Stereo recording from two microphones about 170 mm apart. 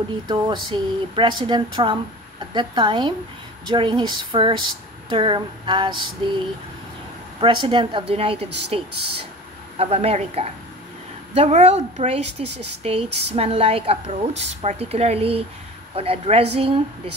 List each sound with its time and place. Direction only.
0.3 s speech: 25° right (ahead or behind)
7.3 s a woman's voice: 30° right (ahead or behind)